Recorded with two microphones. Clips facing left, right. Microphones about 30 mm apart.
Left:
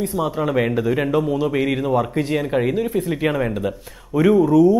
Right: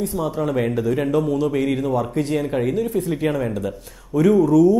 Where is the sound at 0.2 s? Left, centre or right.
Left.